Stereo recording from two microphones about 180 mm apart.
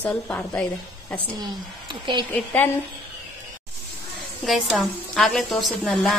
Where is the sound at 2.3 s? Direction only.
10° left (ahead or behind).